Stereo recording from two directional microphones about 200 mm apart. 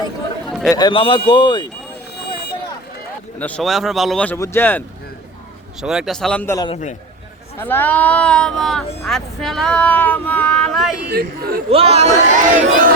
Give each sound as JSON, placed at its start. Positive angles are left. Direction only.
{"t": 0.7, "sound": "a man's voice", "side_deg": 20}
{"t": 2.1, "sound": "vehicle", "side_deg": 55}
{"t": 3.3, "sound": "speech", "side_deg": 5}
{"t": 5.8, "sound": "speech", "side_deg": -5}
{"t": 11.0, "sound": "speech", "side_deg": -50}
{"t": 11.7, "sound": "speech", "side_deg": -30}